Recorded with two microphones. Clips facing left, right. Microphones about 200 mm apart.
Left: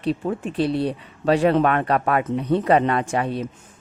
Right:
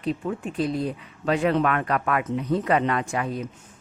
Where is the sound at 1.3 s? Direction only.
30° left (ahead or behind).